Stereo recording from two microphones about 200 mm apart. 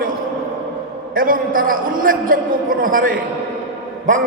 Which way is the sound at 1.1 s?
45° right (ahead or behind).